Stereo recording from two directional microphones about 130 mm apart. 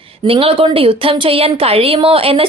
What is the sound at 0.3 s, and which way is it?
A woman's voice, 45° right (ahead or behind).